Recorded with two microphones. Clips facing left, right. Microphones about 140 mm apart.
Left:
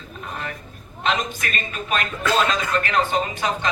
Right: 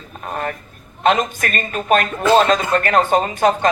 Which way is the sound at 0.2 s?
45° right (ahead or behind).